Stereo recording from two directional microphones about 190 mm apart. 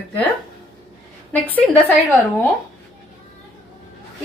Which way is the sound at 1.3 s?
10° left (ahead or behind).